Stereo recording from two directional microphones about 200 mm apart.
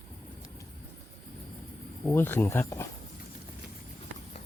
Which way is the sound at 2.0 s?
10° left (ahead or behind).